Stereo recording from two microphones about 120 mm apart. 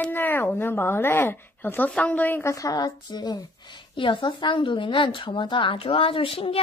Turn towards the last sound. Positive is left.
turn(degrees=50)  # may be behind; listen again after turning